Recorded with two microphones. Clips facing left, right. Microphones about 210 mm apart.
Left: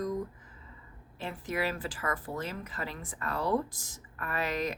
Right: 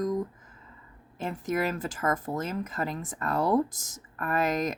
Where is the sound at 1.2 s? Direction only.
45° right (ahead or behind).